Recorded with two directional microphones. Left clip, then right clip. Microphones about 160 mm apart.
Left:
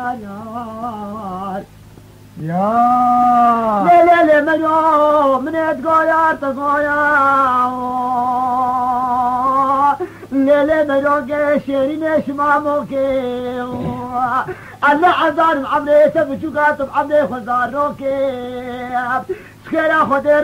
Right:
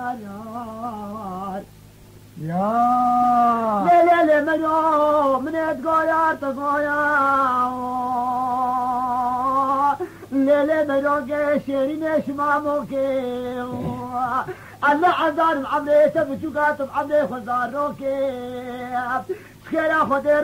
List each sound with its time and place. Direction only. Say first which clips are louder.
2.5 s speech: left 5 dB; 30° right (ahead or behind)